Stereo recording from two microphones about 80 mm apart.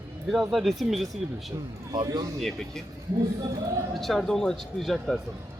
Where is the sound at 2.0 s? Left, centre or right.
Right.